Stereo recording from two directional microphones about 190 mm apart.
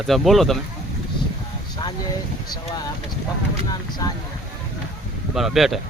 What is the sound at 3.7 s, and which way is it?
Boat, 20° left (ahead or behind).